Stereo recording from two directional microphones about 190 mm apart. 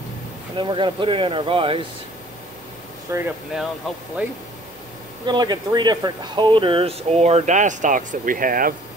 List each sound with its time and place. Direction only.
0.6 s speech: 25° right (ahead or behind)
3.1 s speech: 15° right (ahead or behind)
5.2 s speech: 25° right (ahead or behind); by 8.7 s 50° right (ahead or behind)